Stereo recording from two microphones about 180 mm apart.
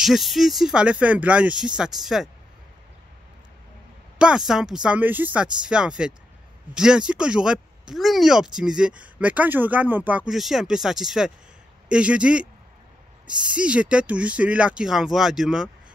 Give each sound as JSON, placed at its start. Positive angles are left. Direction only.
{"t": 0.0, "sound": "speech", "side_deg": 0}
{"t": 4.2, "sound": "speech", "side_deg": -5}
{"t": 13.6, "sound": "speech", "side_deg": -5}